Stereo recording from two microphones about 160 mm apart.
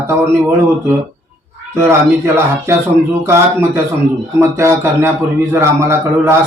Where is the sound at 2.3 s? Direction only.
15° right (ahead or behind).